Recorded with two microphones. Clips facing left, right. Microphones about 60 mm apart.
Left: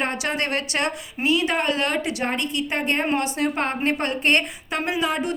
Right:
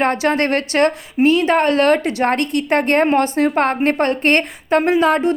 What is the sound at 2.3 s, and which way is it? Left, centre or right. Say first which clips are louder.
Speech: right 8 dB; right.